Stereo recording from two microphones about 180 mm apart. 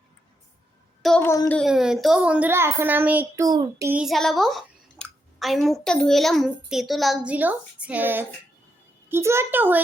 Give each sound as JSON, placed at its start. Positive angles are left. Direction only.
{"t": 1.0, "sound": "a woman's voice", "side_deg": 5}
{"t": 1.3, "sound": "speech", "side_deg": 15}
{"t": 1.5, "sound": "a child's voice", "side_deg": 0}
{"t": 3.4, "sound": "child singing", "side_deg": -20}
{"t": 3.8, "sound": "a woman's voice", "side_deg": -5}